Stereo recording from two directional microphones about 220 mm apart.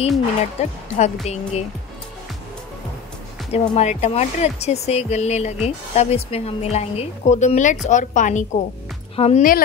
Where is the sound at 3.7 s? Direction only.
30° left (ahead or behind).